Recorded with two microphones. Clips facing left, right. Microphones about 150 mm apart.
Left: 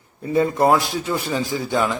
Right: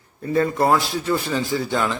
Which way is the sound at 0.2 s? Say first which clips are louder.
Left 1 dB; 20° left (ahead or behind).